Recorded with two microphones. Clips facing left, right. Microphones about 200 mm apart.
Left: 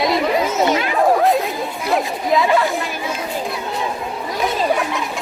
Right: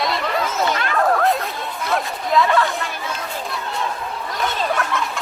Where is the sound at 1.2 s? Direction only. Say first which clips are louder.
Left 4 dB; centre (ahead or behind).